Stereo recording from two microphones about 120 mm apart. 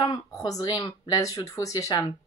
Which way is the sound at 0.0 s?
30° left (ahead or behind).